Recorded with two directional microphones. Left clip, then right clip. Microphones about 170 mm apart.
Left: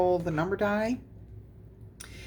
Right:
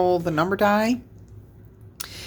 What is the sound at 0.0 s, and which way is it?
Speech, 30° right (ahead or behind).